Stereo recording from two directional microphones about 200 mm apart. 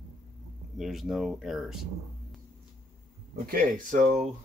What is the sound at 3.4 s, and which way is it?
Speech, 45° right (ahead or behind).